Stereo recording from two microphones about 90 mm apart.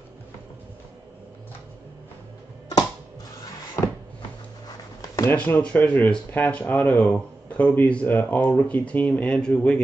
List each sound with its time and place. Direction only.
3.8 s cupboard open or close: 35° left (ahead or behind)
5.3 s speech: 15° left (ahead or behind)